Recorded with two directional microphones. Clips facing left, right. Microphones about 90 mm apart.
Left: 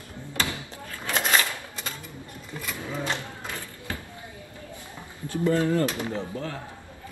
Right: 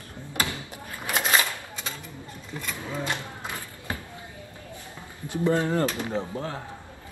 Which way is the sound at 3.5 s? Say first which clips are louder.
Right 2 dB; 20° right (ahead or behind).